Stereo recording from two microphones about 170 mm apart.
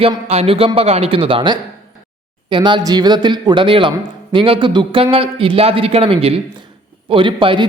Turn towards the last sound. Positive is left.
turn(degrees=-30)  # may be behind; listen again after turning